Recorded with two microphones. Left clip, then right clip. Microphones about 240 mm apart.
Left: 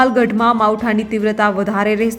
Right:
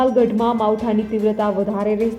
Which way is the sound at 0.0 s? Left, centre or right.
Centre.